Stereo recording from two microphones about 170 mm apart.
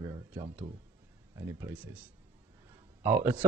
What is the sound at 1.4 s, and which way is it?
Speech, 15° right (ahead or behind).